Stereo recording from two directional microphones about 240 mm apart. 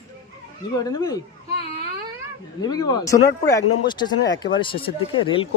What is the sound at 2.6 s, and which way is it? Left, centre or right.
Speech, centre.